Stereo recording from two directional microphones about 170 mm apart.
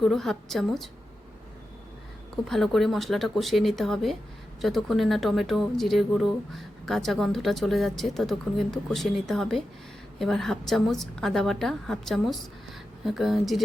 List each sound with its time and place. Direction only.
0.0 s speech: centre (ahead or behind)
2.5 s speech: centre (ahead or behind)